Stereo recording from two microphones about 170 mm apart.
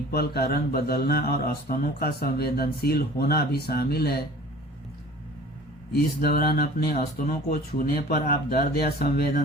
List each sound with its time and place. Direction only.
0.1 s speech: 70° left (ahead or behind)
5.9 s speech: 65° left (ahead or behind)